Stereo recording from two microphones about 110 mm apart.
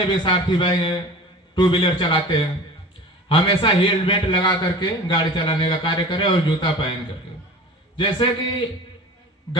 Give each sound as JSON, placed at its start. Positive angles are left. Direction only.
{"t": 0.1, "sound": "a man's voice", "side_deg": 45}